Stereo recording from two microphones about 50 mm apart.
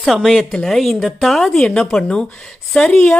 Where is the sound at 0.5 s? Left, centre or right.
Centre.